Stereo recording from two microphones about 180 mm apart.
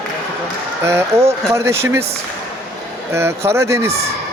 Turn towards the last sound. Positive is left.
turn(degrees=-15)  # may be behind; listen again after turning